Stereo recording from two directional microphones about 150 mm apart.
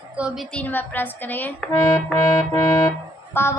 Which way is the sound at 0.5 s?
10° left (ahead or behind).